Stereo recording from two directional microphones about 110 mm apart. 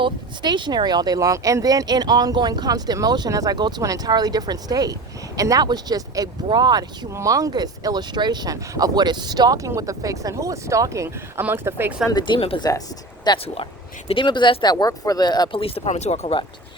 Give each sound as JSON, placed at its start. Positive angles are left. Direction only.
{"t": 0.0, "sound": "speech", "side_deg": -45}
{"t": 7.1, "sound": "speech", "side_deg": -30}
{"t": 12.1, "sound": "speech", "side_deg": 45}
{"t": 12.5, "sound": "speech", "side_deg": 35}
{"t": 15.5, "sound": "speech", "side_deg": 60}